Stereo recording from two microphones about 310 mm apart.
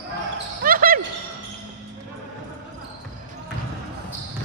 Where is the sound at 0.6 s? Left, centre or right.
Right.